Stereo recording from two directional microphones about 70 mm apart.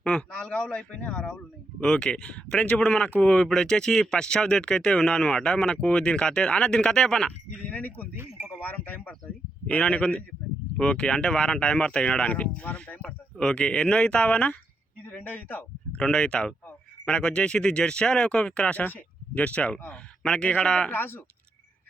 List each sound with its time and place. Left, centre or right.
0.0 s speech: centre
7.6 s speech: left
8.1 s a sound: right
8.6 s speech: left
13.3 s a man's voice: centre; by 16.0 s left
16.0 s speech: centre
20.9 s speech: left